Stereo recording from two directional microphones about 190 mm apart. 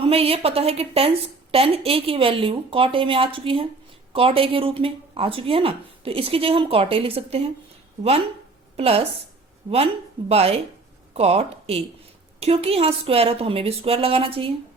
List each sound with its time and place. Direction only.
0.0 s speech: 30° right (ahead or behind)
8.7 s a woman's voice: 35° right (ahead or behind)